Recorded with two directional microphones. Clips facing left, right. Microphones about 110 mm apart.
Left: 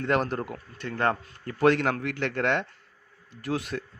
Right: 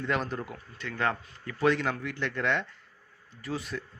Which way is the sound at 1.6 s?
60° left (ahead or behind).